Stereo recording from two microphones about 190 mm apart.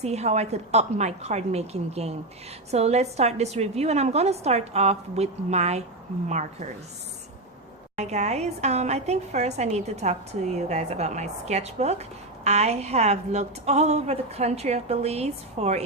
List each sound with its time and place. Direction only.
0.0 s a woman's voice: 35° right (ahead or behind)
7.9 s a woman's voice: 35° right (ahead or behind)